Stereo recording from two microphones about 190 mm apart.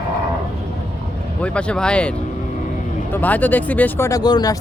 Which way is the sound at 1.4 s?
5° left (ahead or behind).